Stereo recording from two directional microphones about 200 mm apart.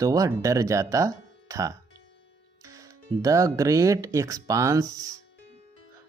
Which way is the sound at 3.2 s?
15° right (ahead or behind).